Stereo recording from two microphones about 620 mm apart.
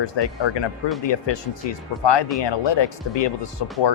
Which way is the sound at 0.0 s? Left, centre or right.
Left.